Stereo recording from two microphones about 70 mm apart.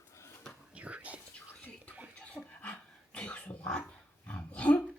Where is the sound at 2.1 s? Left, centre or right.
Centre.